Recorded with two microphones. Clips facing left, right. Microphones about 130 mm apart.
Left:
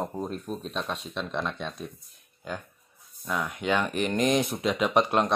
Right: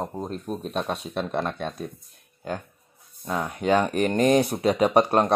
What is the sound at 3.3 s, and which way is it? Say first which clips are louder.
Speech: right 4 dB; 30° right (ahead or behind).